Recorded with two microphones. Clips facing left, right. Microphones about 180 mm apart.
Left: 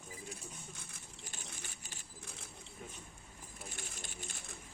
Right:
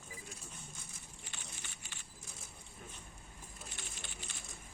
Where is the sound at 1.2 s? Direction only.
40° left (ahead or behind).